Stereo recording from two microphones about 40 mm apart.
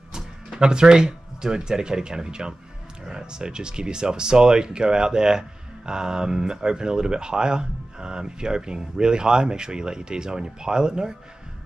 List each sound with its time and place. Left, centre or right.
0.5 s speech: right